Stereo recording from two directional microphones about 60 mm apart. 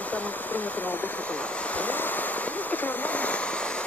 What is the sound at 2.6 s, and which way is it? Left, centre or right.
Speech, left.